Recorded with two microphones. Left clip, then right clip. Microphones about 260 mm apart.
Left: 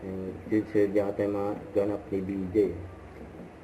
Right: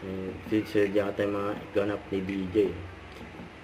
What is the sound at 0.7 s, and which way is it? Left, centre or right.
Speech, right.